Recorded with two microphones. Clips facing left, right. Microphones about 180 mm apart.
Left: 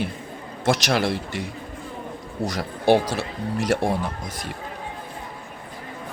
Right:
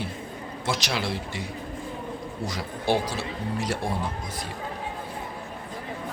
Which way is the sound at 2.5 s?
70° left (ahead or behind).